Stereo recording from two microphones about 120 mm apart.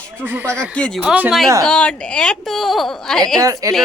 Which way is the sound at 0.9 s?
10° right (ahead or behind).